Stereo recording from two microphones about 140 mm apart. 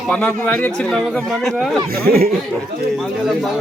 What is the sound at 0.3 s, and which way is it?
Speech, 15° left (ahead or behind).